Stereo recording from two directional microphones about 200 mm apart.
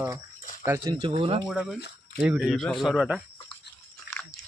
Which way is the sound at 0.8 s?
25° right (ahead or behind).